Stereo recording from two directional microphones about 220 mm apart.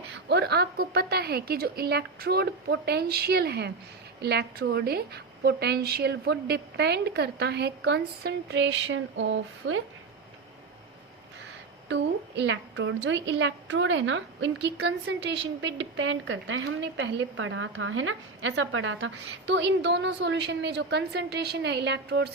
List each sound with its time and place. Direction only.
0.1 s a woman's voice: 50° right (ahead or behind)
11.9 s a woman's voice: 55° right (ahead or behind)